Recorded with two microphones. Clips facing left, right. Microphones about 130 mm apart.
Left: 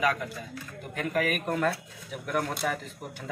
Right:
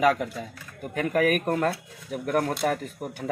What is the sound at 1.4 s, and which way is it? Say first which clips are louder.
Speech: right 3 dB; 40° right (ahead or behind).